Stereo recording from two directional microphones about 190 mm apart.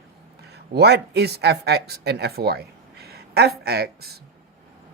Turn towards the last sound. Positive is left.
turn(degrees=-55)  # may be behind; listen again after turning